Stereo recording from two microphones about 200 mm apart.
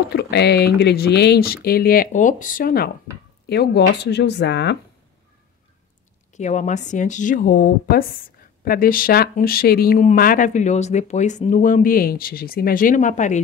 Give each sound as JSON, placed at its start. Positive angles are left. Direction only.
{"t": 0.1, "sound": "speech", "side_deg": 55}
{"t": 6.3, "sound": "a woman's voice", "side_deg": 35}